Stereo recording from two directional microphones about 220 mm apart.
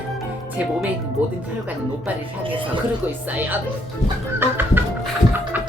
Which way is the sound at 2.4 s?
25° right (ahead or behind).